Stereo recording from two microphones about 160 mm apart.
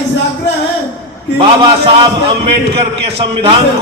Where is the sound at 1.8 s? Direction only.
35° right (ahead or behind).